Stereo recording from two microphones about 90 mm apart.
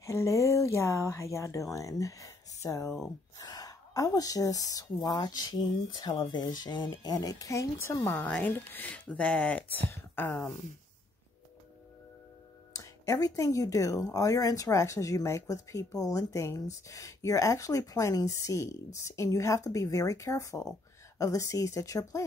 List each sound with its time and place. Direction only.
0.0 s a woman's voice: 35° left (ahead or behind)
8.1 s speech: 15° left (ahead or behind)
12.7 s speech: 40° left (ahead or behind)